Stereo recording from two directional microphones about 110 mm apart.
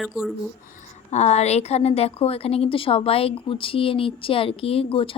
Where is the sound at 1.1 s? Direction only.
90° left.